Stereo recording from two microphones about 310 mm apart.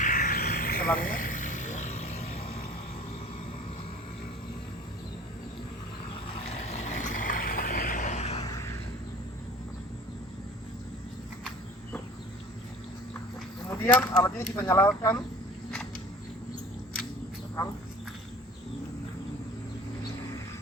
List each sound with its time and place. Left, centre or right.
0.0 s vehicle: left
6.6 s vehicle: left
13.7 s speech: centre